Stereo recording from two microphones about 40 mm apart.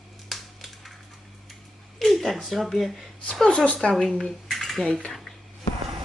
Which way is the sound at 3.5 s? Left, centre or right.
Left.